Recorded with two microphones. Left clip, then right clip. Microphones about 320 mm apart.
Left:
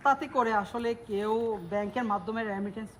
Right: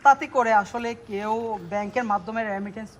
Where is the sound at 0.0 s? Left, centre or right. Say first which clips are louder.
Right 8 dB; right.